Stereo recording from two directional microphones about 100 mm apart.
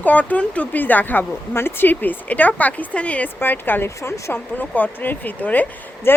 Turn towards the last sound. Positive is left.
turn(degrees=20)  # may be behind; listen again after turning